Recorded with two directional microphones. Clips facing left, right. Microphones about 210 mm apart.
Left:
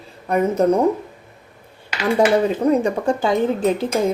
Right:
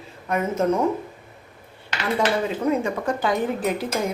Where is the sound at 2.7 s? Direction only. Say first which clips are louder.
Left 5 dB; 30° left (ahead or behind).